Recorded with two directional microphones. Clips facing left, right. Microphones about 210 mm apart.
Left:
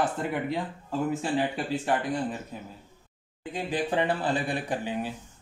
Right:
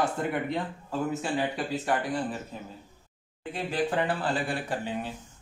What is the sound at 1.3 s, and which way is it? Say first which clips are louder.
Speech: left 2 dB; 25° left (ahead or behind).